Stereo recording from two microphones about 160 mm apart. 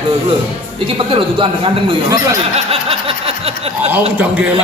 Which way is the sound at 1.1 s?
30° right (ahead or behind).